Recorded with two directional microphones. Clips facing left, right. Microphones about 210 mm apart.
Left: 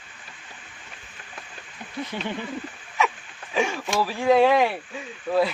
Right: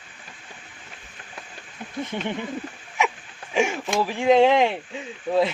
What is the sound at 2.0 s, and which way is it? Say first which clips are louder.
Speech: right 2 dB; 20° right (ahead or behind).